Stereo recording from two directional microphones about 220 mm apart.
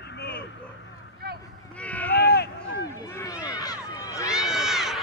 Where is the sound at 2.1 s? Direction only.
45° left (ahead or behind).